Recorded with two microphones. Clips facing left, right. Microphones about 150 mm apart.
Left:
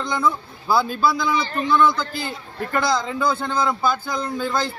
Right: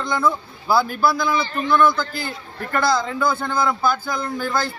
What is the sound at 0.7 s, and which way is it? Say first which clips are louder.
Speech: right 1 dB; 20° left (ahead or behind).